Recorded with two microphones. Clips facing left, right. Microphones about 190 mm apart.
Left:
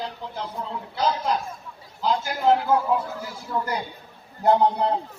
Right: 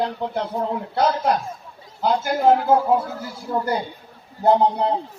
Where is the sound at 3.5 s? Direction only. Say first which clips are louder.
Right 4 dB; 30° right (ahead or behind).